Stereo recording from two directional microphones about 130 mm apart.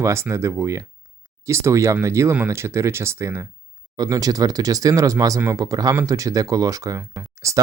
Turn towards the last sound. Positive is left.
turn(degrees=-25)  # may be behind; listen again after turning